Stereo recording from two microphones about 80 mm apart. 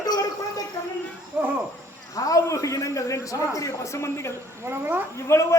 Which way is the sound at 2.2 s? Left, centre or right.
Left.